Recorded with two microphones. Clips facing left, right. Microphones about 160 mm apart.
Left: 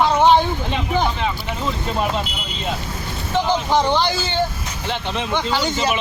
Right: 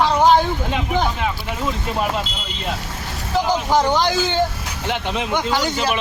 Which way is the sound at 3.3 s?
5° right (ahead or behind).